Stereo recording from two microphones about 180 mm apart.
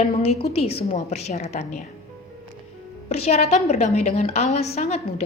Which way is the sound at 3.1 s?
35° left (ahead or behind).